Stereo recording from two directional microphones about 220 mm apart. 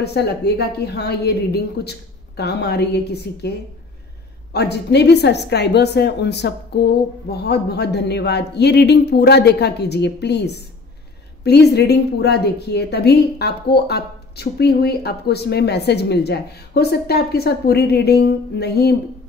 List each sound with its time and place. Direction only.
0.0 s a woman's voice: 50° left (ahead or behind)